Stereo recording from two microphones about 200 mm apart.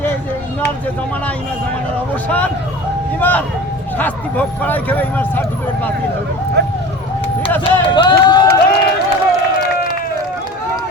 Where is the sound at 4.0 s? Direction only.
10° left (ahead or behind).